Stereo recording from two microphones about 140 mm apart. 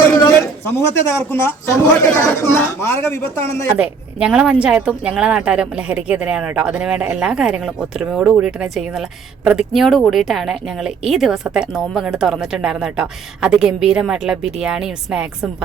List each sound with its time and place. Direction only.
0.3 s a man's voice: 20° left (ahead or behind)
3.8 s speech: 10° right (ahead or behind)